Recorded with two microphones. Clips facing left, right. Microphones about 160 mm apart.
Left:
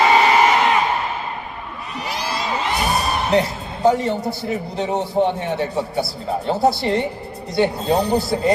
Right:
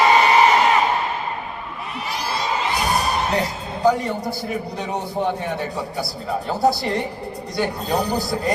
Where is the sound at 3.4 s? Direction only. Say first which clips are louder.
Left 4 dB; 25° left (ahead or behind).